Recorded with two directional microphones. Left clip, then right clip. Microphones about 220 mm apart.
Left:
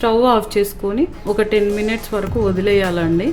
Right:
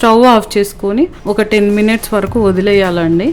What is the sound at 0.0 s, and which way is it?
Speech, 35° right (ahead or behind).